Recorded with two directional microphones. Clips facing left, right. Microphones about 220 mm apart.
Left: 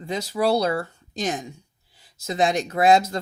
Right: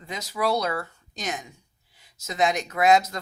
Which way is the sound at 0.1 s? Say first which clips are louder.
Left 4 dB; 30° left (ahead or behind).